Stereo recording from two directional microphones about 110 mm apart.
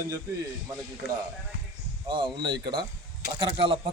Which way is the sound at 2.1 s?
45° right (ahead or behind).